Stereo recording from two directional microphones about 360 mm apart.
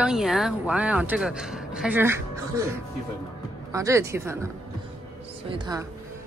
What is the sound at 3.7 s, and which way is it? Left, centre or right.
A woman's voice, centre.